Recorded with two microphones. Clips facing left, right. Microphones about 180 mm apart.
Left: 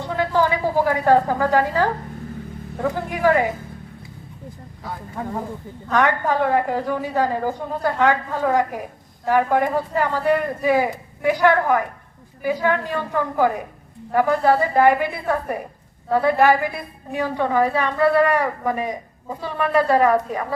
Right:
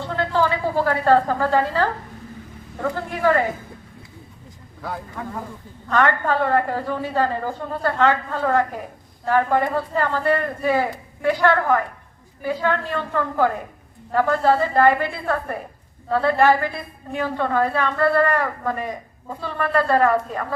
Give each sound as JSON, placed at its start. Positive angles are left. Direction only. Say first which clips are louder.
{"t": 0.0, "sound": "a woman's voice", "louder": "left 1 dB", "side_deg": 15}
{"t": 2.9, "sound": "a woman's voice", "louder": "left 1 dB", "side_deg": 15}
{"t": 5.2, "sound": "speech", "louder": "left 8 dB", "side_deg": 35}
{"t": 5.9, "sound": "a woman's voice", "louder": "even", "side_deg": 15}